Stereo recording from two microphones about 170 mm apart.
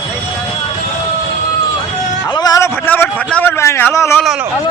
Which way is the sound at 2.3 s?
25° left (ahead or behind).